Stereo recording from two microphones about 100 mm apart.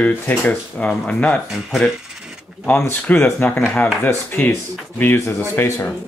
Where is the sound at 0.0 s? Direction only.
15° left (ahead or behind).